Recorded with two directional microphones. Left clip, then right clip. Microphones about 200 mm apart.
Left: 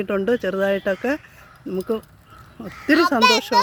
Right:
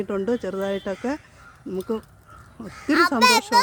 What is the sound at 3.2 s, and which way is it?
Speech, 30° right (ahead or behind).